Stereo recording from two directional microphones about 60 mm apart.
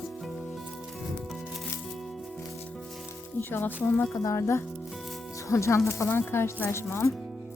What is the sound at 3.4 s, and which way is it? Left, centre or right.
Speech, left.